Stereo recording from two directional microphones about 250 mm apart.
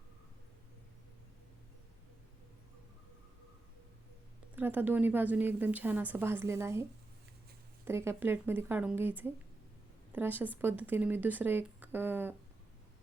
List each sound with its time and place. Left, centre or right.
4.5 s speech: centre
7.9 s speech: centre